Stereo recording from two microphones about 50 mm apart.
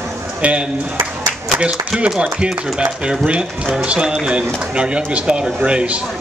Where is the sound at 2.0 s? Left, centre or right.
Centre.